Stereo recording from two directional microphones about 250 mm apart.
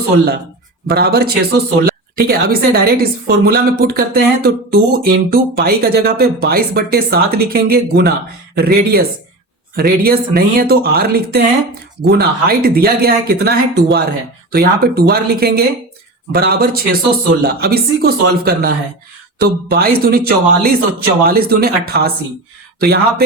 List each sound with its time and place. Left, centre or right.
0.9 s a woman's voice: right